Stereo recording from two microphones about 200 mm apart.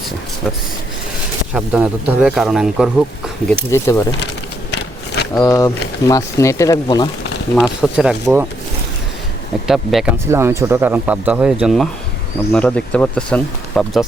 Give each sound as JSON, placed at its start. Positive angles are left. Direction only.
{"t": 1.5, "sound": "speech", "side_deg": -5}
{"t": 3.5, "sound": "speech", "side_deg": 15}
{"t": 5.3, "sound": "speech", "side_deg": 15}
{"t": 7.5, "sound": "speech", "side_deg": -5}
{"t": 9.6, "sound": "speech", "side_deg": 0}
{"t": 10.2, "sound": "speech", "side_deg": -15}